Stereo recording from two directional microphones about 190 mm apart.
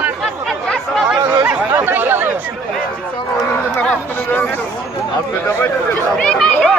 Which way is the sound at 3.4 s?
10° left (ahead or behind).